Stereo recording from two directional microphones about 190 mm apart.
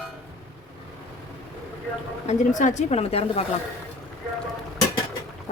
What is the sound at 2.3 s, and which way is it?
A woman's voice, 40° left (ahead or behind).